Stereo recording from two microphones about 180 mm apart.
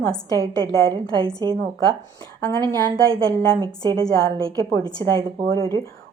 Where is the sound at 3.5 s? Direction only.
20° right (ahead or behind).